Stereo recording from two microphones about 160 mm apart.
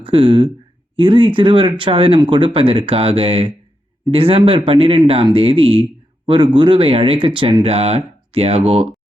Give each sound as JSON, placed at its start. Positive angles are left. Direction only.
{"t": 0.0, "sound": "speech", "side_deg": -35}